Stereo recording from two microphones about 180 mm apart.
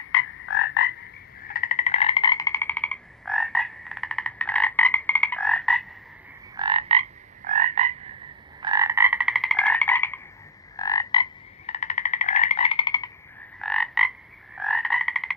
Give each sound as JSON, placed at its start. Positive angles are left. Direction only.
{"t": 0.2, "sound": "frog", "side_deg": 90}
{"t": 1.4, "sound": "frog", "side_deg": 55}
{"t": 6.6, "sound": "frog", "side_deg": -30}
{"t": 7.4, "sound": "frog", "side_deg": -45}
{"t": 8.6, "sound": "frog", "side_deg": -20}
{"t": 13.6, "sound": "frog", "side_deg": 5}